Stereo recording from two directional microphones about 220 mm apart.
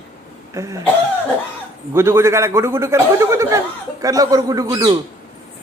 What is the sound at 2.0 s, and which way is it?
A man's voice, 10° right (ahead or behind).